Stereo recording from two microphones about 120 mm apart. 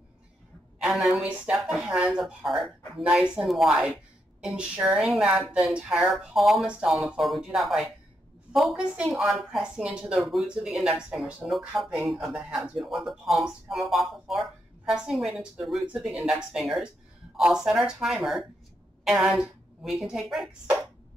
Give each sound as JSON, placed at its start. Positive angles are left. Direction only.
{"t": 0.7, "sound": "a woman's voice", "side_deg": 0}